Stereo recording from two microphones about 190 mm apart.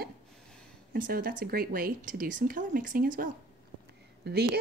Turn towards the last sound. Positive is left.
turn(degrees=-60)  # may be behind; listen again after turning